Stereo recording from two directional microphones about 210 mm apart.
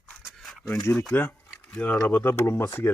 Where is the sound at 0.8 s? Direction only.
10° left (ahead or behind).